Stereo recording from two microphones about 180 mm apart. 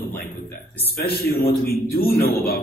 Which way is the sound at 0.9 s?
60° left (ahead or behind).